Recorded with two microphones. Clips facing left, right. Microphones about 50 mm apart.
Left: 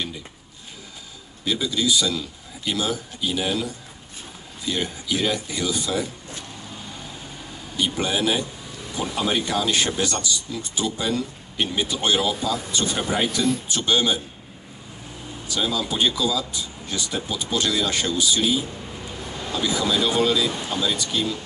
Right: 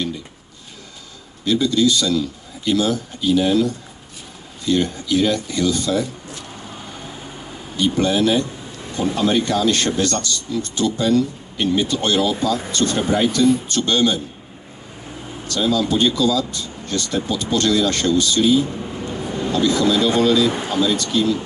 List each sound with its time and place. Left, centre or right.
1.4 s a man's voice: centre
7.7 s a man's voice: centre
15.4 s a man's voice: centre
19.0 s vehicle: centre
20.2 s a man's voice: centre